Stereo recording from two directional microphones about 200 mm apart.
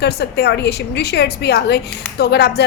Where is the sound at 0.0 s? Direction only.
55° left (ahead or behind).